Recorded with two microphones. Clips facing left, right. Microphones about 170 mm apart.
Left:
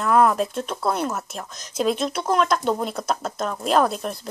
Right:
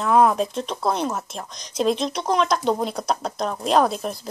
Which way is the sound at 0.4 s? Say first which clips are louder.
Even; 5° left (ahead or behind).